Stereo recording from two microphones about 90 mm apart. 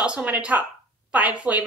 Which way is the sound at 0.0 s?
15° right (ahead or behind).